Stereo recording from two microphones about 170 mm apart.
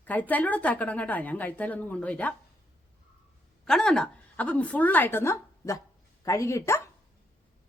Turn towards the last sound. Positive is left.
turn(degrees=15)  # may be behind; listen again after turning